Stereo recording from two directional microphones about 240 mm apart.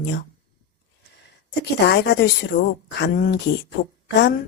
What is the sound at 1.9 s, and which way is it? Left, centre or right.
Speech, left.